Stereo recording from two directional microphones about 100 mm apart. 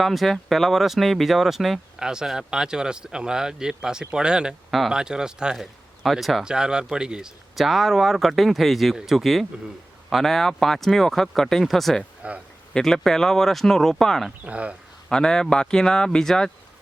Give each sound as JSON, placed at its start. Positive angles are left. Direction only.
{"t": 0.0, "sound": "speech", "side_deg": 0}
{"t": 12.2, "sound": "speech", "side_deg": -15}
{"t": 12.7, "sound": "speech", "side_deg": 5}
{"t": 14.4, "sound": "speech", "side_deg": -15}
{"t": 15.1, "sound": "speech", "side_deg": 5}